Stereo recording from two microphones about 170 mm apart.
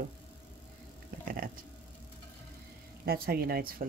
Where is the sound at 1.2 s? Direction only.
60° right (ahead or behind).